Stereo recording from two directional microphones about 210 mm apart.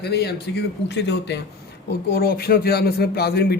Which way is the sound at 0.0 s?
50° left (ahead or behind).